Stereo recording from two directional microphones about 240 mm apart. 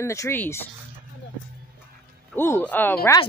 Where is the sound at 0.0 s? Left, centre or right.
Centre.